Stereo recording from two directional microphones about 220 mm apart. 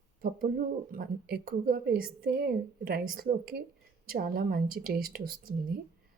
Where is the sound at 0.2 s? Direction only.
40° right (ahead or behind).